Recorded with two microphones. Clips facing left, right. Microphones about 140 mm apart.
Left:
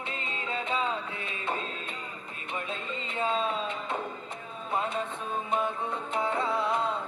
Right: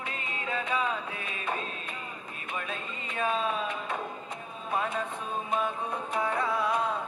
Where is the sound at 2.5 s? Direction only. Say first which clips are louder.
Left 2 dB; 20° left (ahead or behind).